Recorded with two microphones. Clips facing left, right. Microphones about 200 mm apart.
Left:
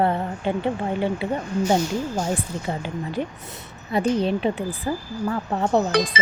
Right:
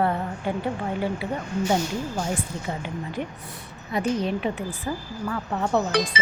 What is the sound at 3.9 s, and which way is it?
A woman's voice, 30° left (ahead or behind).